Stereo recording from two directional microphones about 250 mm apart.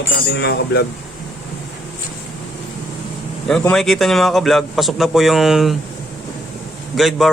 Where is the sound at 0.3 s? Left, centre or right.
Left.